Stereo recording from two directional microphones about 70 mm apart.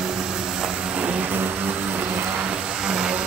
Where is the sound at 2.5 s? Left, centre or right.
Centre.